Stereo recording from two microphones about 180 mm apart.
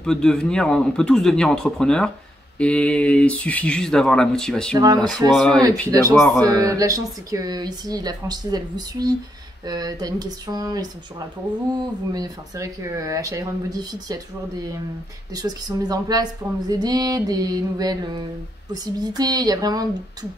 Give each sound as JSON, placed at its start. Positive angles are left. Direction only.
{"t": 0.0, "sound": "speech", "side_deg": 5}
{"t": 4.7, "sound": "speech", "side_deg": -20}
{"t": 5.3, "sound": "speech", "side_deg": 0}
{"t": 5.6, "sound": "speech", "side_deg": -20}
{"t": 12.1, "sound": "speech", "side_deg": -20}